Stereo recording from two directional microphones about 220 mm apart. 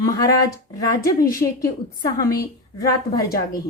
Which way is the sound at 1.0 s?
40° left (ahead or behind).